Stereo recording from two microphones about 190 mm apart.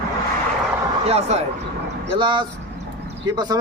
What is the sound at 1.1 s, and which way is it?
Speech, 35° right (ahead or behind).